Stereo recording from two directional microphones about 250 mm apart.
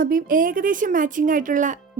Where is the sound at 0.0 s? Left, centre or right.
Right.